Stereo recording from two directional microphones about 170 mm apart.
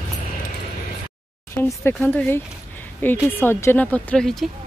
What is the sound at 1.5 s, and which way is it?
A woman's voice, 15° left (ahead or behind).